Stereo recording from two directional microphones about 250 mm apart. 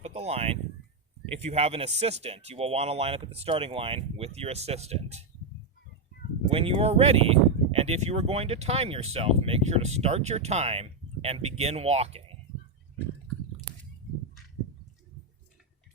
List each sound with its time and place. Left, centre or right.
0.0 s speech: right
6.5 s speech: right